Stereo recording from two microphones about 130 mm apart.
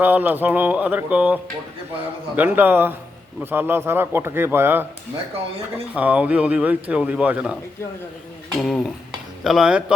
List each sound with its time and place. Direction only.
0.0 s speech: 15° right (ahead or behind)
5.9 s speech: 10° right (ahead or behind)
8.5 s speech: 5° left (ahead or behind)